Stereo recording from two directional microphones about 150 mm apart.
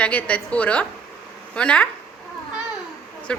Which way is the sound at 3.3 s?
5° left (ahead or behind).